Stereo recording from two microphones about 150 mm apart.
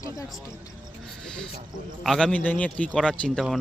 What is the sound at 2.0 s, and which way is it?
A man's voice, 5° left (ahead or behind).